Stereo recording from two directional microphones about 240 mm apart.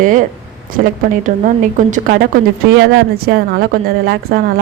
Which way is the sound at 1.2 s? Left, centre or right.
Right.